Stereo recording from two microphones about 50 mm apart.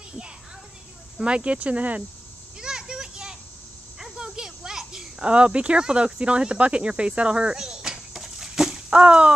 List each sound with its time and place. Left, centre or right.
1.1 s speech: right
2.6 s children playing: centre
4.0 s snake: centre
5.2 s speech: right